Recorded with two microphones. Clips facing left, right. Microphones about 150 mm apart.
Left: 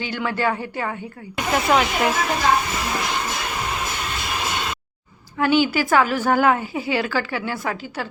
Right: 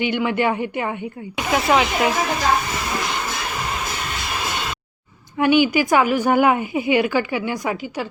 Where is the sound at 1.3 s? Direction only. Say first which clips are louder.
Right 1 dB; 5° right (ahead or behind).